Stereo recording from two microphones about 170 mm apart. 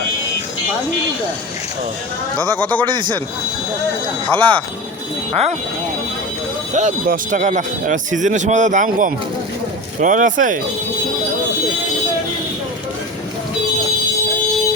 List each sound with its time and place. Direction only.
2.8 s a man's voice: 25° right (ahead or behind)
4.4 s a man's voice: 30° right (ahead or behind)
6.7 s a man's voice: 45° right (ahead or behind)